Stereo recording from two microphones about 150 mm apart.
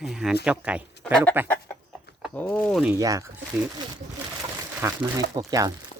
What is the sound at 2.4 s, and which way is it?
Speech, 10° left (ahead or behind).